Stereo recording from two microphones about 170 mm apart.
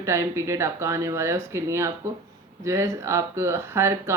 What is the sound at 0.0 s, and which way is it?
Speech, 15° right (ahead or behind).